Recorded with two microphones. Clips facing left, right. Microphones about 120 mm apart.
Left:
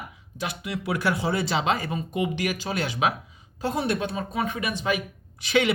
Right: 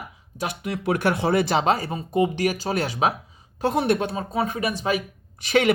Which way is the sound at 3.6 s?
60° right (ahead or behind).